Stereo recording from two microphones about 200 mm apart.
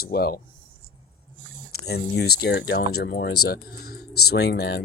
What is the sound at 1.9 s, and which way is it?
Speech, 55° left (ahead or behind).